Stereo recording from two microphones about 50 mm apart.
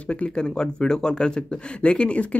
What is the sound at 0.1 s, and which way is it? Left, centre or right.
Speech, left.